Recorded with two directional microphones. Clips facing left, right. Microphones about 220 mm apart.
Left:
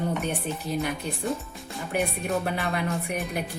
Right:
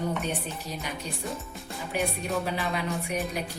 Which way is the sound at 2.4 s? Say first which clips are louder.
Left 2 dB; 55° left (ahead or behind).